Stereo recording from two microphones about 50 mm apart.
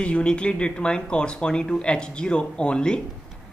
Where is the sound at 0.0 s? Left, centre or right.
Left.